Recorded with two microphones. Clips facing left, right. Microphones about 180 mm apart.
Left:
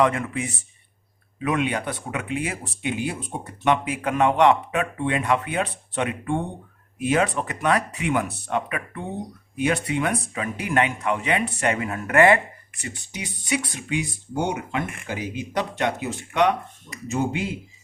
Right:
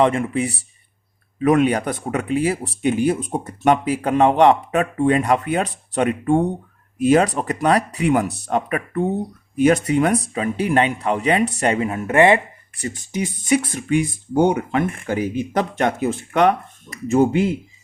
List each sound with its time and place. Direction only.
0.0 s speech: 25° right (ahead or behind)
12.7 s speech: 40° right (ahead or behind)